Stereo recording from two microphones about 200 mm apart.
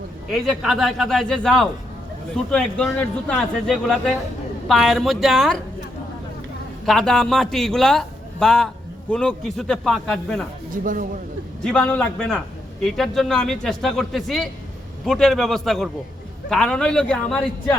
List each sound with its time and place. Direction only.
0.3 s a man's voice: centre (ahead or behind)
6.8 s a man's voice: centre (ahead or behind)
10.7 s speech: 40° right (ahead or behind)
11.6 s a man's voice: 5° left (ahead or behind)